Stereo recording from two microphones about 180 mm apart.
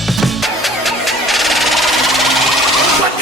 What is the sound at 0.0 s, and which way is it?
Music, centre (ahead or behind).